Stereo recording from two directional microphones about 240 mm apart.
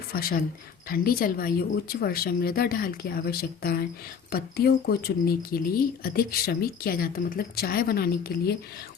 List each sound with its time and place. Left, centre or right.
0.1 s speech: left